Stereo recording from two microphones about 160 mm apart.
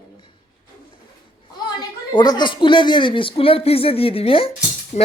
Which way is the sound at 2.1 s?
30° left (ahead or behind).